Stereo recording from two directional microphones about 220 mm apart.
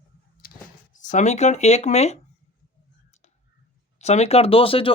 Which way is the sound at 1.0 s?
35° left (ahead or behind).